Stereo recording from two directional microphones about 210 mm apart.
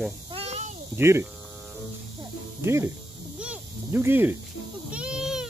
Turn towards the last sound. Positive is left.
turn(degrees=-5)  # may be behind; listen again after turning